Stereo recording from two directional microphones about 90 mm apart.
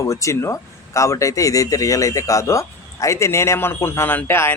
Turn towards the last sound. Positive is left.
turn(degrees=25)  # may be behind; listen again after turning